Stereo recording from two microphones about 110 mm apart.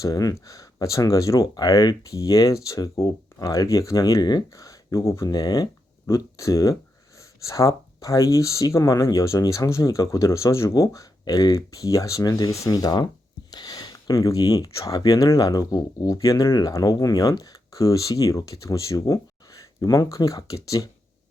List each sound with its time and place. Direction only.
0.0 s speech: 35° left (ahead or behind)